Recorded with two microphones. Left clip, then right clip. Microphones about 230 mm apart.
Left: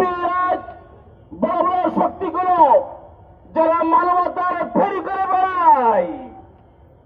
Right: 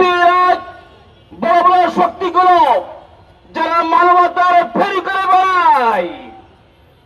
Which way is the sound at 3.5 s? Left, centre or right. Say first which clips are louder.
Right 3 dB; right.